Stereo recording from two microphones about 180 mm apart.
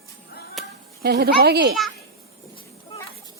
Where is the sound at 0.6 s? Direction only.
Centre (ahead or behind).